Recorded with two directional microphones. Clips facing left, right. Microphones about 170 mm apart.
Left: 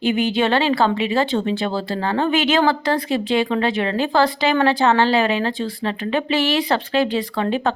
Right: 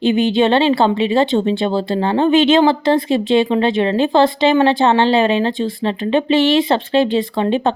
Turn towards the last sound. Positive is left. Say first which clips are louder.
# right 4 dB
turn(degrees=-25)  # may be behind; listen again after turning